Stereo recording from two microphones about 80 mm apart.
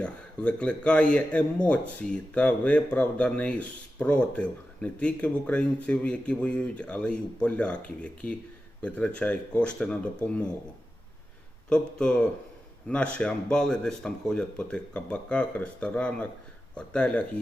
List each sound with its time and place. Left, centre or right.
0.0 s speech: centre
11.7 s speech: centre